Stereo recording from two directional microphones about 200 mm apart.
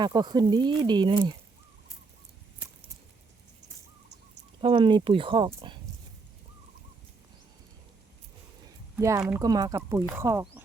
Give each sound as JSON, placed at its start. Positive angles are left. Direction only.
{"t": 0.0, "sound": "speech", "side_deg": -20}
{"t": 4.6, "sound": "speech", "side_deg": -25}
{"t": 9.0, "sound": "speech", "side_deg": -15}